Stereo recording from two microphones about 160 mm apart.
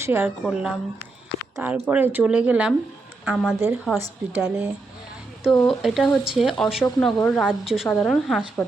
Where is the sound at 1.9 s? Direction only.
10° right (ahead or behind).